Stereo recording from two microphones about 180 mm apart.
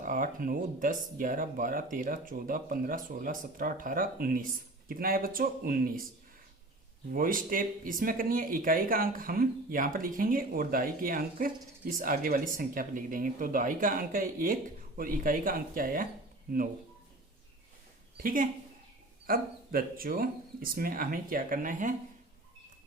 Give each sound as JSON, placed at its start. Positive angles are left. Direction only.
{"t": 0.0, "sound": "speech", "side_deg": -50}
{"t": 7.1, "sound": "speech", "side_deg": -50}
{"t": 18.2, "sound": "speech", "side_deg": -50}